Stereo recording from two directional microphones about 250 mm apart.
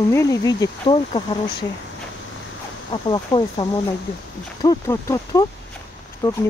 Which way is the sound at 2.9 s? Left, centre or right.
Centre.